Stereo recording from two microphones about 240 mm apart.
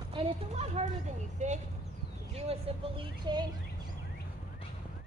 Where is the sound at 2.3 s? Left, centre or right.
Right.